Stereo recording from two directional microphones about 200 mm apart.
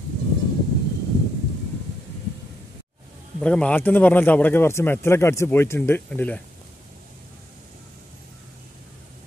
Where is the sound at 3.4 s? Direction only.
5° left (ahead or behind).